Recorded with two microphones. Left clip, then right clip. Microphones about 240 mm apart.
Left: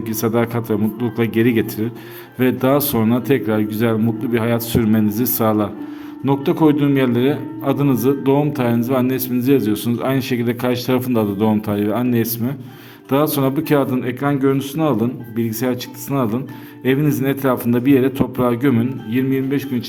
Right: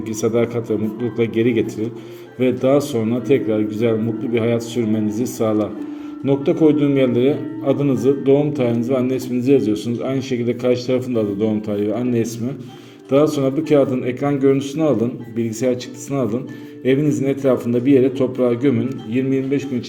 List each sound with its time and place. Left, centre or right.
0.1 s a man's voice: left